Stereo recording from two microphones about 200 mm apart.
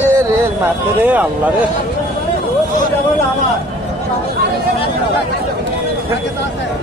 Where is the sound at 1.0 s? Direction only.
5° right (ahead or behind).